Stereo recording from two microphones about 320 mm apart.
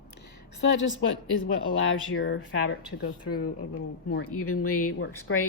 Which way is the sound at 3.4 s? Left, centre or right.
Left.